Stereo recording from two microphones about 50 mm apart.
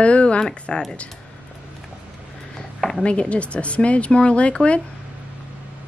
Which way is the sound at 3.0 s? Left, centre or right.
Left.